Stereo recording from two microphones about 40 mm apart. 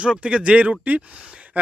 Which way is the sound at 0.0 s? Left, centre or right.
Right.